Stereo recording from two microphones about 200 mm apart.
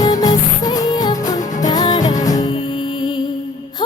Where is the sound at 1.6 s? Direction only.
20° left (ahead or behind).